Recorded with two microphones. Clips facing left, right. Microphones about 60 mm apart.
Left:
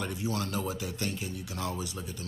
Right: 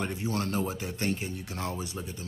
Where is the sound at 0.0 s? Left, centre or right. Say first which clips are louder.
Right 2 dB; right.